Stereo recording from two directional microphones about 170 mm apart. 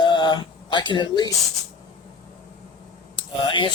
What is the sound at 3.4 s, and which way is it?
Speech, 30° left (ahead or behind).